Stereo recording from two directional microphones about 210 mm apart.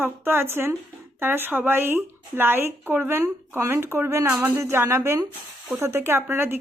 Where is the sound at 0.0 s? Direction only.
10° right (ahead or behind).